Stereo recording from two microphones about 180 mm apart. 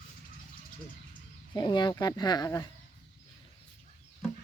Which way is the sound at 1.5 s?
25° left (ahead or behind).